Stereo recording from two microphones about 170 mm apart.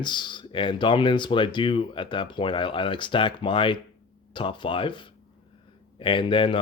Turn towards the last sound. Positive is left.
turn(degrees=30)  # may be behind; listen again after turning